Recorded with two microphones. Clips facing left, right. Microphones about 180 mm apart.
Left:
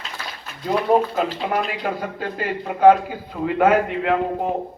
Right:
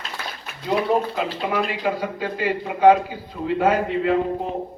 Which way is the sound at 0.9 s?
45° left (ahead or behind).